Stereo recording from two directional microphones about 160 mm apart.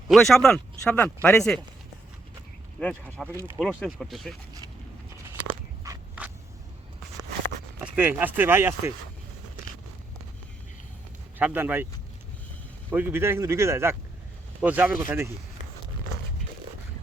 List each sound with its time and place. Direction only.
0.1 s speech: centre (ahead or behind)
2.8 s speech: 10° left (ahead or behind)
5.5 s biting: 20° right (ahead or behind)
7.9 s speech: 10° right (ahead or behind)
11.3 s speech: 10° right (ahead or behind)
12.9 s speech: 10° right (ahead or behind)